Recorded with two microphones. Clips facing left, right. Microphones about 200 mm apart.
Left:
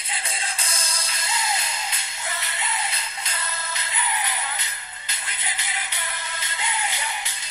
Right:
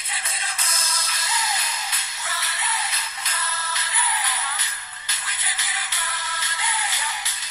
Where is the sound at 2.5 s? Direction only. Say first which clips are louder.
Even; 30° left (ahead or behind).